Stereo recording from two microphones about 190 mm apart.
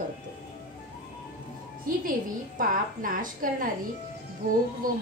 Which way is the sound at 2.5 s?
45° right (ahead or behind).